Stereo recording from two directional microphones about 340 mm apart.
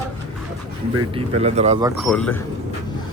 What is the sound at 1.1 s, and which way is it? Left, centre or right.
Speech, centre.